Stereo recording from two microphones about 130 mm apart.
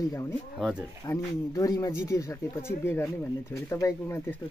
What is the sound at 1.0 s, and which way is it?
Speech, 30° left (ahead or behind).